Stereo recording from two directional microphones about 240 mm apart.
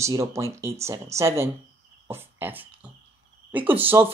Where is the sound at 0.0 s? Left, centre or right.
Centre.